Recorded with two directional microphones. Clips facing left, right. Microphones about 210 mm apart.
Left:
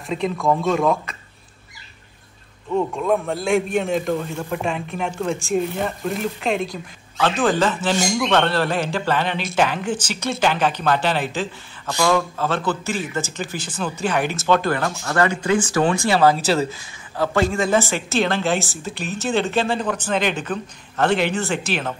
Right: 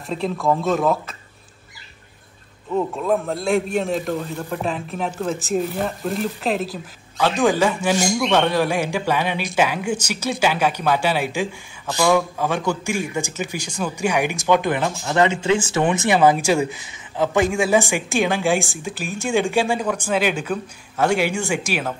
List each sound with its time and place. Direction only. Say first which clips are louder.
0.0 s speech: left 1 dB; centre (ahead or behind)
2.7 s a man's voice: left 1 dB; centre (ahead or behind)